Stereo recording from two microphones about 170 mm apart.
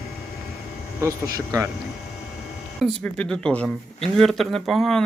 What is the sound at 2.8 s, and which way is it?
Speech, 5° left (ahead or behind).